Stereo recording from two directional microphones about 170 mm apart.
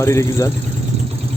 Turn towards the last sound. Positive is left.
turn(degrees=20)  # may be behind; listen again after turning